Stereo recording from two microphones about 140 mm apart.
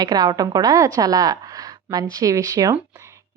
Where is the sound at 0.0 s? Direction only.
30° right (ahead or behind).